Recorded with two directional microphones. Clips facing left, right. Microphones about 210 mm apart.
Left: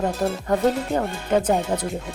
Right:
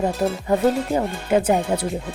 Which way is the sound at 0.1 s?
Centre (ahead or behind).